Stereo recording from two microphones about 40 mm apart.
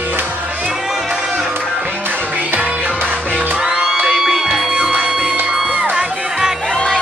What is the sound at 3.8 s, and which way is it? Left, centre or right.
Music, centre.